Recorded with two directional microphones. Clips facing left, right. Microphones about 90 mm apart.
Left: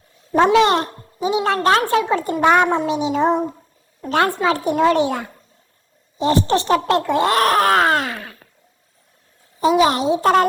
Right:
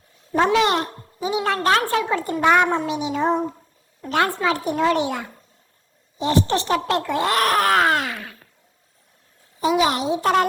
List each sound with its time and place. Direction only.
0.3 s a woman's voice: 30° left (ahead or behind)
9.6 s speech: 35° left (ahead or behind)